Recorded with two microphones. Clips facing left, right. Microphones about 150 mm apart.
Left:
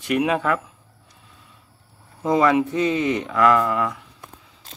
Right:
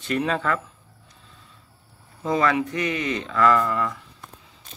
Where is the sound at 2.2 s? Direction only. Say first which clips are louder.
Left 4 dB; 20° left (ahead or behind).